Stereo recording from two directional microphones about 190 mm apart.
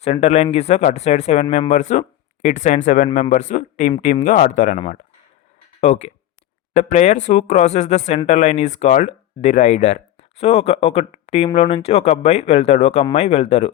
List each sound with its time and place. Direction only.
0.0 s speech: 35° left (ahead or behind)
5.8 s speech: 40° left (ahead or behind)